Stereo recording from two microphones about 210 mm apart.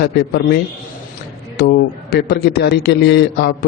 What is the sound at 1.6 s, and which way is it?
A man's voice, 50° left (ahead or behind).